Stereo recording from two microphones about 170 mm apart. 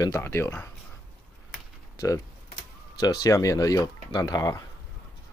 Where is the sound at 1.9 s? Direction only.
20° left (ahead or behind).